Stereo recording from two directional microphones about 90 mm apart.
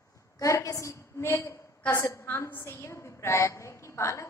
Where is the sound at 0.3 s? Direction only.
35° left (ahead or behind).